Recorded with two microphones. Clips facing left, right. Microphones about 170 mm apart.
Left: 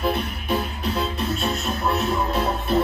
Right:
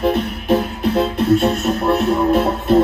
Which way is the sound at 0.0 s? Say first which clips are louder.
Right 7 dB; 50° right (ahead or behind).